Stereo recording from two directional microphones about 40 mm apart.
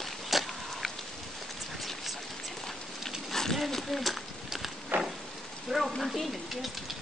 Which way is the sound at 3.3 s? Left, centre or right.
Centre.